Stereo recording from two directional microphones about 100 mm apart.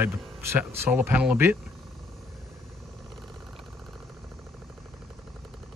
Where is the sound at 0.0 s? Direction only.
20° right (ahead or behind).